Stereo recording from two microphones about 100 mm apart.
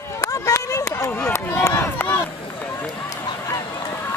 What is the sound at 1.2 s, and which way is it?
Run, 30° left (ahead or behind).